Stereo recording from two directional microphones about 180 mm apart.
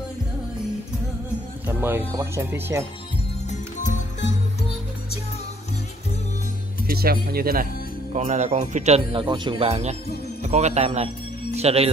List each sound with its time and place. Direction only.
1.7 s speech: 10° right (ahead or behind)
3.4 s music: 45° left (ahead or behind)
6.9 s speech: 55° right (ahead or behind)
8.1 s speech: 40° right (ahead or behind)